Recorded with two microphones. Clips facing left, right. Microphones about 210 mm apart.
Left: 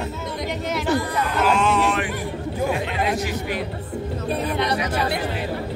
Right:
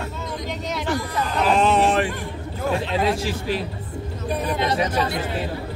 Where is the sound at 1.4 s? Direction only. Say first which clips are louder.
Right 2 dB; 35° right (ahead or behind).